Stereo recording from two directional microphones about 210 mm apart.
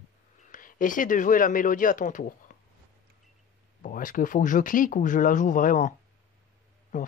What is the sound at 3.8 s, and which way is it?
Speech, 40° left (ahead or behind).